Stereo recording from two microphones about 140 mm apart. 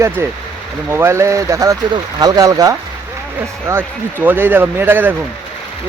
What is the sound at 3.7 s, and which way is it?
Speech, 15° right (ahead or behind).